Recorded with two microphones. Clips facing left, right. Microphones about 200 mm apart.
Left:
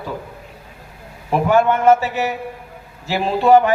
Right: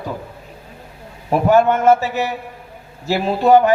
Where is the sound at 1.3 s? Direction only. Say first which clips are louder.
Right 2 dB; 40° right (ahead or behind).